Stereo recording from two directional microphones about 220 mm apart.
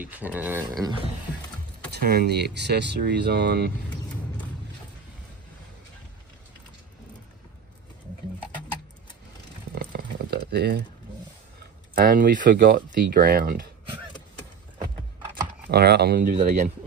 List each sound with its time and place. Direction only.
0.0 s speech: 10° right (ahead or behind)
1.9 s speech: 45° right (ahead or behind)
9.7 s a sound: 45° right (ahead or behind)
11.9 s speech: 40° right (ahead or behind)
15.7 s speech: 45° right (ahead or behind)